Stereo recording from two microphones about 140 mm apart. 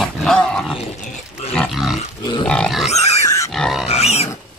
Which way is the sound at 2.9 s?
50° left (ahead or behind).